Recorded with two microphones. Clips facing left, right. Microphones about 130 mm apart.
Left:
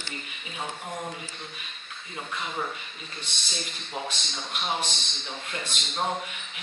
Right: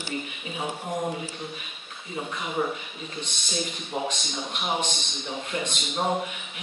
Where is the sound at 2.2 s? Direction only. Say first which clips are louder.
Right 4 dB; 10° right (ahead or behind).